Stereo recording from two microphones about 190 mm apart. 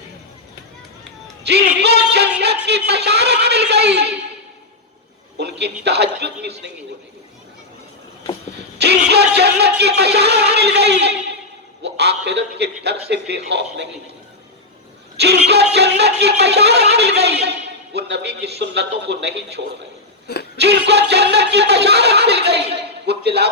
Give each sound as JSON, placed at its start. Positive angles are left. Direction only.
{"t": 1.5, "sound": "music", "side_deg": -60}
{"t": 2.6, "sound": "speech", "side_deg": -60}
{"t": 5.4, "sound": "speech", "side_deg": -60}
{"t": 9.0, "sound": "a man's voice", "side_deg": -60}
{"t": 15.4, "sound": "speech", "side_deg": -60}
{"t": 20.2, "sound": "speech", "side_deg": 55}
{"t": 20.6, "sound": "speech", "side_deg": -60}